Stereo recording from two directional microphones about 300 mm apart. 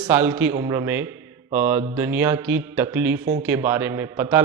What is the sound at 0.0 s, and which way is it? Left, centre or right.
Mantra, centre.